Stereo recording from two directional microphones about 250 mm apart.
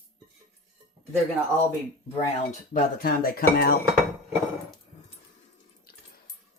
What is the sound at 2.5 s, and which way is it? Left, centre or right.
Speech, left.